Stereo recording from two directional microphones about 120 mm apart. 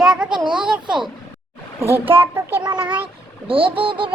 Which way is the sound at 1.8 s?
20° right (ahead or behind).